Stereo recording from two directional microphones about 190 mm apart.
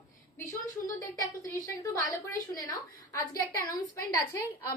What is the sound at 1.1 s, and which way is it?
Speech, 20° left (ahead or behind).